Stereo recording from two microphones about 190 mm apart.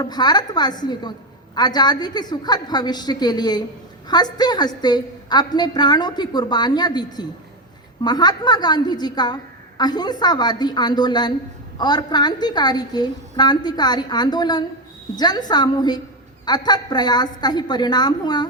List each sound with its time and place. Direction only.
0.0 s a woman's voice: 20° left (ahead or behind)